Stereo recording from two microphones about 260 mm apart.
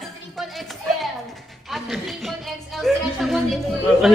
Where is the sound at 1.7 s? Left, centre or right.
Centre.